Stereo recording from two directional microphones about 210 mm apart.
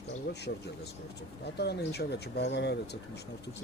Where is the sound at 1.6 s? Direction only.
50° left (ahead or behind).